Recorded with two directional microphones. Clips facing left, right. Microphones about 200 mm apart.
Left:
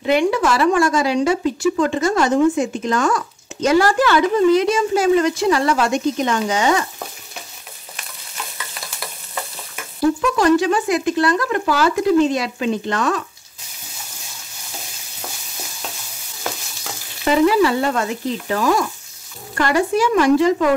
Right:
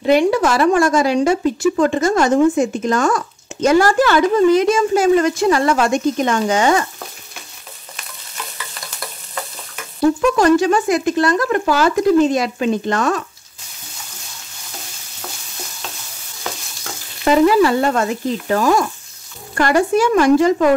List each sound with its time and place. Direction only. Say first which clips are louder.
0.0 s a woman's voice: right 3 dB; 40° right (ahead or behind)
10.3 s a woman's voice: right 2 dB; 45° right (ahead or behind)
17.2 s a woman's voice: right 2 dB; 45° right (ahead or behind)